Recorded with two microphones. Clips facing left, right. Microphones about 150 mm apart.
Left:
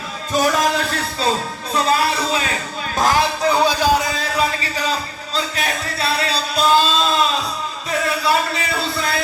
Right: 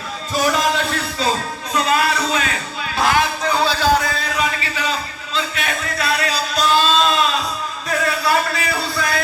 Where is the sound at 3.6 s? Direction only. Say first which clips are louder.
Left 1 dB; 15° left (ahead or behind).